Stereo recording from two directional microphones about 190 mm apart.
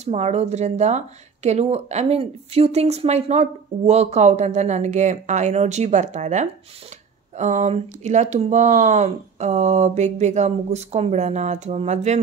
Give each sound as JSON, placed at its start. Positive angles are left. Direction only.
{"t": 0.0, "sound": "speech", "side_deg": -35}